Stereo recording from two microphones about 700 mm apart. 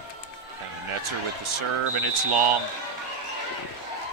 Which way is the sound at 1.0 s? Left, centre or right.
Right.